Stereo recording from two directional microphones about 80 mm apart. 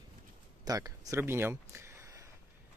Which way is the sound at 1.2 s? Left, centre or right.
Right.